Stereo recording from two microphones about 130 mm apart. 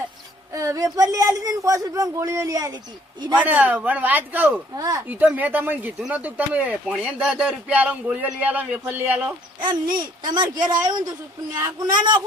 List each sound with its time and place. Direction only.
0.5 s speech: 25° right (ahead or behind)
3.3 s a man's voice: 10° right (ahead or behind)
4.7 s speech: 25° right (ahead or behind)
5.0 s a man's voice: 15° right (ahead or behind)
9.6 s speech: 35° right (ahead or behind)
11.5 s speech: 20° right (ahead or behind)